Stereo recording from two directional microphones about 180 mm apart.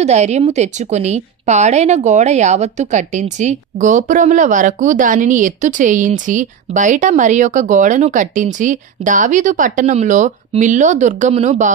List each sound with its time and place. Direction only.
0.0 s a woman's voice: 40° right (ahead or behind)